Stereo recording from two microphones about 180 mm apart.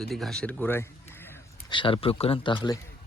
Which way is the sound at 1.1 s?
10° left (ahead or behind).